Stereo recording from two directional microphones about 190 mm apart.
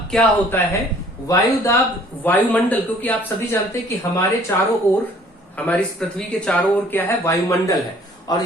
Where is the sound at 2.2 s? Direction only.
10° left (ahead or behind).